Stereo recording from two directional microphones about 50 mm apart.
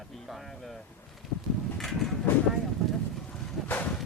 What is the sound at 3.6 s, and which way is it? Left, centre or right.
Vehicle, left.